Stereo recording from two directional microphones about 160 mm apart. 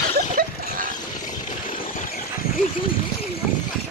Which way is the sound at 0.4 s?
65° right (ahead or behind).